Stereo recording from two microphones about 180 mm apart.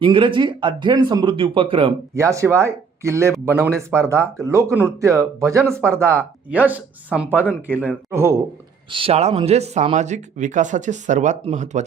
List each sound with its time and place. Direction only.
0.0 s speech: 30° right (ahead or behind)
2.1 s speech: 15° right (ahead or behind)
8.9 s speech: 30° right (ahead or behind)